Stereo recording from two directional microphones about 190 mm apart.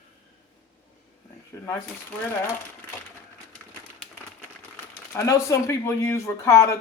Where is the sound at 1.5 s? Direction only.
15° left (ahead or behind).